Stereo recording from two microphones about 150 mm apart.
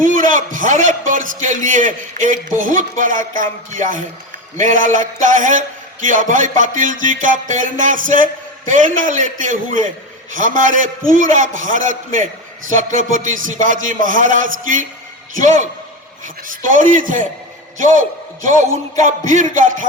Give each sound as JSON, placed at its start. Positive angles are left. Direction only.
{"t": 0.0, "sound": "music", "side_deg": -60}
{"t": 19.3, "sound": "music", "side_deg": -60}